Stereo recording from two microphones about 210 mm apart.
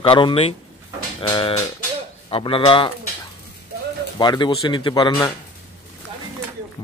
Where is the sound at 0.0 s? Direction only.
25° left (ahead or behind).